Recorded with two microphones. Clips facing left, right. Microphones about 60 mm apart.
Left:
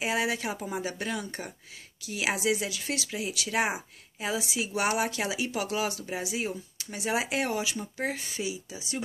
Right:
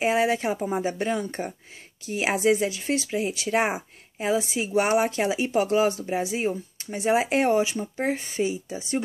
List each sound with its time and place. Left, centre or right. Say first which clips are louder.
0.0 s speech: right 7 dB; right